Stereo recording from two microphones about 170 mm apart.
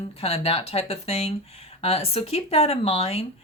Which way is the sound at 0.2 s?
35° left (ahead or behind).